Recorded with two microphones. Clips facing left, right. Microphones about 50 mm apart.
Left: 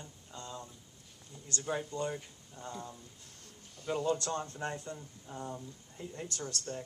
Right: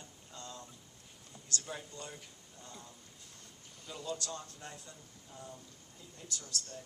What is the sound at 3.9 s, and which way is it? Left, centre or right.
Speech, left.